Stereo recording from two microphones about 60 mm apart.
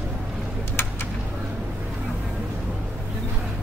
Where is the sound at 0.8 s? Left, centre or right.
Left.